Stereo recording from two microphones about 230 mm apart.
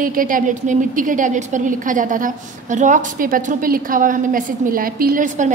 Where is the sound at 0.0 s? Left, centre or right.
Right.